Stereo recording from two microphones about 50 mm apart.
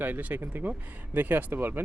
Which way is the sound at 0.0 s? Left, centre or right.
Right.